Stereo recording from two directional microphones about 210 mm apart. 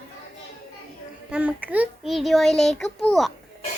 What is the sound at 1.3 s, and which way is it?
A child's voice, 5° right (ahead or behind).